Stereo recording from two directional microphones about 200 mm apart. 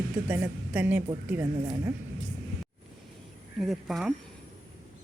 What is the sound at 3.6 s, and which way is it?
Speech, centre (ahead or behind).